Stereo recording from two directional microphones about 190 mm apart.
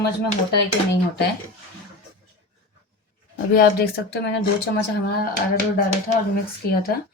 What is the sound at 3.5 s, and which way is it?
Speech, 55° left (ahead or behind).